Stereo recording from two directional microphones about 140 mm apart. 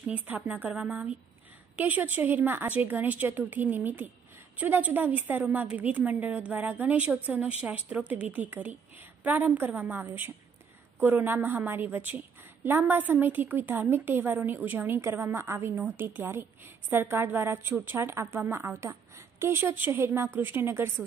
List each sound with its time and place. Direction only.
0.0 s a woman's voice: 10° right (ahead or behind)